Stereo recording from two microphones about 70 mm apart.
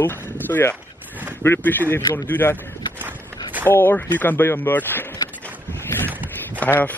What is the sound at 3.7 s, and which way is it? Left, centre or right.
Speech, left.